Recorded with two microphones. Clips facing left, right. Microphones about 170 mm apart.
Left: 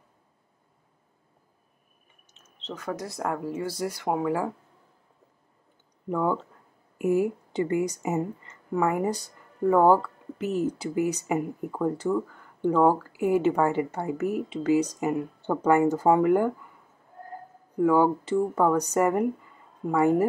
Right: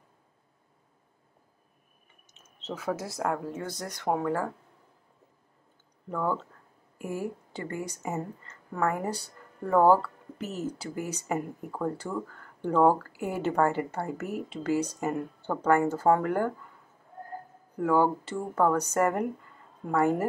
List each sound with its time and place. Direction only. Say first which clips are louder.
2.5 s speech: right 1 dB; 10° right (ahead or behind); by 4.6 s 10° left (ahead or behind)
6.0 s a woman's voice: left 4 dB; 15° left (ahead or behind)
17.7 s a woman's voice: left 3 dB; 10° left (ahead or behind)